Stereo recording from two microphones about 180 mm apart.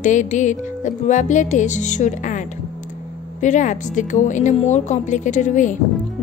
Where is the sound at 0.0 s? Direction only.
45° left (ahead or behind).